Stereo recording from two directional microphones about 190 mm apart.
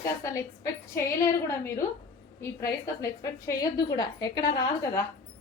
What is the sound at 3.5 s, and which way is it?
A woman's voice, 20° left (ahead or behind).